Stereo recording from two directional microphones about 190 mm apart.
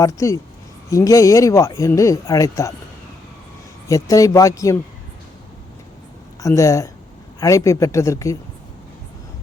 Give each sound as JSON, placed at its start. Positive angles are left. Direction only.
{"t": 0.0, "sound": "speech", "side_deg": 15}
{"t": 3.8, "sound": "speech", "side_deg": 15}
{"t": 6.4, "sound": "speech", "side_deg": 15}